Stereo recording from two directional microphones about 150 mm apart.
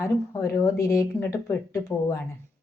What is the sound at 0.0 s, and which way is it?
Speech, 20° left (ahead or behind).